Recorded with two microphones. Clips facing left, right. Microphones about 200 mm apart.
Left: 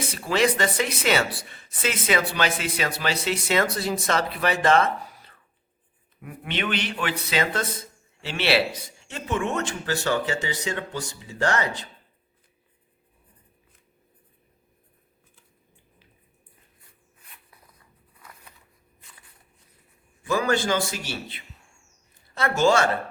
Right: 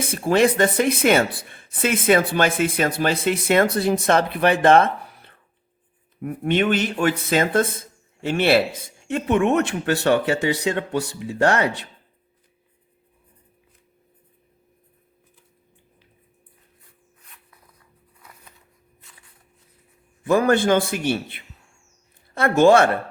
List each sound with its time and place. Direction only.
0.0 s speech: 50° right (ahead or behind)
6.2 s speech: 50° right (ahead or behind)
20.2 s speech: 55° right (ahead or behind)